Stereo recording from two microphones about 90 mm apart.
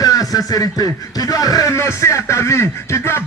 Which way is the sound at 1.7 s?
30° left (ahead or behind).